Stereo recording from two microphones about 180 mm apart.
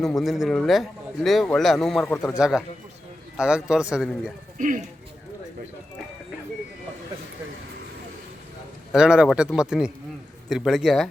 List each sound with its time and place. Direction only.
0.0 s a man's voice: centre (ahead or behind)
4.5 s speech: 45° right (ahead or behind)
8.9 s a man's voice: 5° right (ahead or behind)